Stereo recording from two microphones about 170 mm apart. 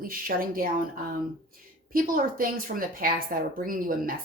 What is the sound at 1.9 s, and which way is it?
Speech, 55° right (ahead or behind).